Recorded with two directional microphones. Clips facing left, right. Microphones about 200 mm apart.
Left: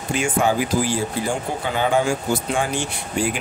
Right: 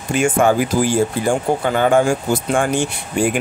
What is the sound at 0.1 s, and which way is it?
Speech, 50° right (ahead or behind).